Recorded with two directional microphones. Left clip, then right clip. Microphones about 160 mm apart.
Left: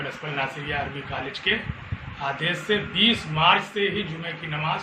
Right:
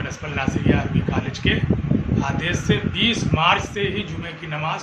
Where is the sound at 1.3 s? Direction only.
5° right (ahead or behind).